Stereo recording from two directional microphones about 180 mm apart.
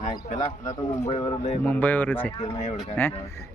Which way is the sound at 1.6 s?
10° left (ahead or behind).